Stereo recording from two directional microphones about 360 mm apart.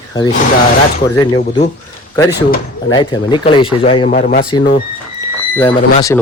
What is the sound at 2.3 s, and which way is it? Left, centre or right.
Speech, left.